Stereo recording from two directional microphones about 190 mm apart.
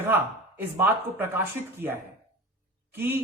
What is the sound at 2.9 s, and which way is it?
Speech, 10° right (ahead or behind).